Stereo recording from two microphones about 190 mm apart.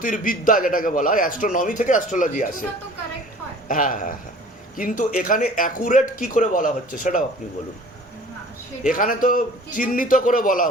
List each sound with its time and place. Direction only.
0.0 s a man's voice: 45° left (ahead or behind)
3.7 s a man's voice: 45° left (ahead or behind)
8.8 s a man's voice: 45° left (ahead or behind)